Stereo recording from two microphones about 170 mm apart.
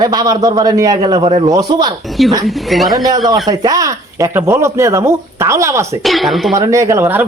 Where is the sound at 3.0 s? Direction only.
20° right (ahead or behind).